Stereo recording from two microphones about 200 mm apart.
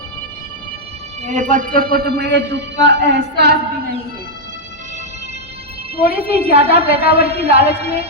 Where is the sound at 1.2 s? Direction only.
40° right (ahead or behind); by 3.6 s 55° right (ahead or behind).